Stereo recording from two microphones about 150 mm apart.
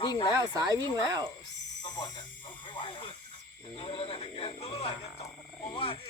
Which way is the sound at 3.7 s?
35° left (ahead or behind).